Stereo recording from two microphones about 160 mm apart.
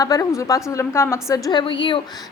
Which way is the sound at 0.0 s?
20° left (ahead or behind).